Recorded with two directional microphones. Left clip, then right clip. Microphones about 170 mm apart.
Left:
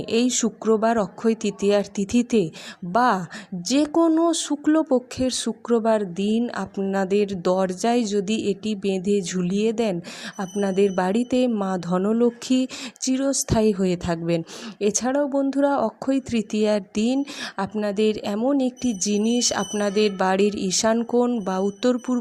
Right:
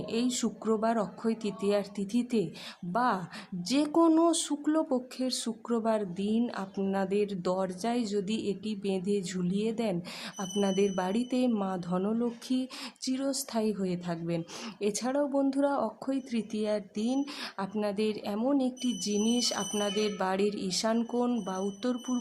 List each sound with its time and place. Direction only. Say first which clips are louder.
0.1 s speech: left 11 dB; 30° left (ahead or behind)